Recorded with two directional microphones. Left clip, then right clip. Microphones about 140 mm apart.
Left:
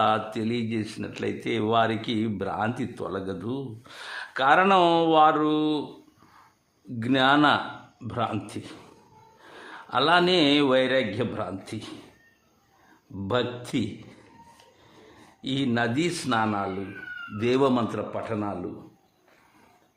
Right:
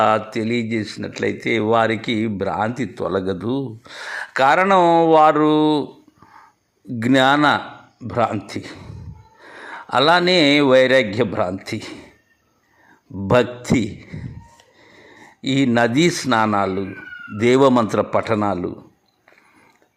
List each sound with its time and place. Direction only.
0.0 s speech: 25° right (ahead or behind)
7.0 s speech: 35° right (ahead or behind)
13.2 s speech: 35° right (ahead or behind)
15.4 s speech: 35° right (ahead or behind)
18.1 s a man's voice: 45° right (ahead or behind)